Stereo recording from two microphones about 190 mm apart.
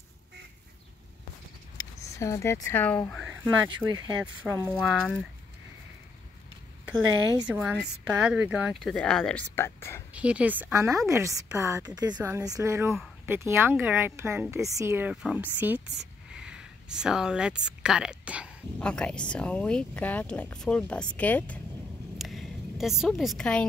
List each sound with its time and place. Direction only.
1.8 s speech: 15° left (ahead or behind)
3.4 s a woman's voice: 20° right (ahead or behind)
4.7 s speech: centre (ahead or behind)
7.4 s a woman's voice: 5° right (ahead or behind); by 10.0 s 10° left (ahead or behind)
10.1 s a woman's voice: 5° right (ahead or behind)
12.9 s a sound: centre (ahead or behind)
13.3 s a woman's voice: 10° right (ahead or behind)
18.8 s speech: 5° left (ahead or behind)
22.2 s a sound: centre (ahead or behind)